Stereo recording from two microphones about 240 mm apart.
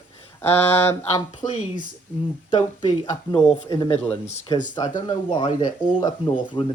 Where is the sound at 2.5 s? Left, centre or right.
Centre.